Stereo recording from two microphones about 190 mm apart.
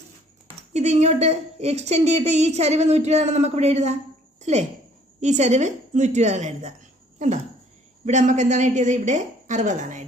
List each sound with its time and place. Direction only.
0.7 s speech: 35° right (ahead or behind)
4.4 s a sound: 35° right (ahead or behind)
5.2 s speech: 35° right (ahead or behind)
8.0 s speech: 40° right (ahead or behind)